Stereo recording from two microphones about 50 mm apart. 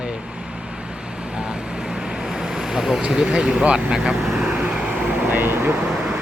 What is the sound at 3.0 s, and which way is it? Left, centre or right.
Speech, centre.